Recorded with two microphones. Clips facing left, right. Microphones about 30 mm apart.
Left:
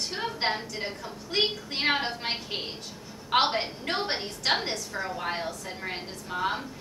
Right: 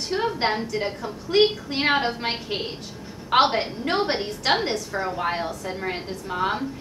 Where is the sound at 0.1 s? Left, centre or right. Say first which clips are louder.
Right 8 dB; centre.